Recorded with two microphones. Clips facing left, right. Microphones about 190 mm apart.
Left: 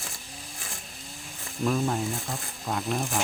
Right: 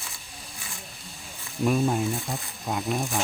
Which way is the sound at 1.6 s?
15° right (ahead or behind).